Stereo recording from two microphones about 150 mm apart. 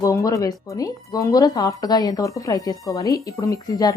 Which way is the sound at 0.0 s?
20° left (ahead or behind).